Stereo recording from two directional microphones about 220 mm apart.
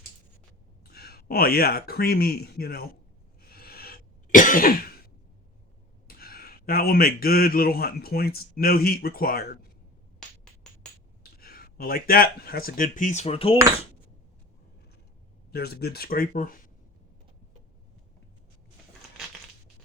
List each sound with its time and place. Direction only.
0.9 s speech: 45° left (ahead or behind)
3.5 s cough: 45° left (ahead or behind)
6.1 s speech: 45° left (ahead or behind)
10.2 s a sound: centre (ahead or behind)
11.2 s speech: 45° left (ahead or behind); by 13.6 s 25° left (ahead or behind)
15.5 s speech: 45° left (ahead or behind)